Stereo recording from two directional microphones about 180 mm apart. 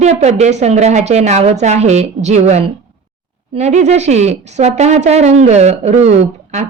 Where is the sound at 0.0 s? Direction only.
40° right (ahead or behind).